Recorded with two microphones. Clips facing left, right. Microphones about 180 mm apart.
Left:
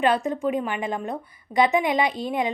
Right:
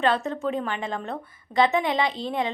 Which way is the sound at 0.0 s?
15° left (ahead or behind).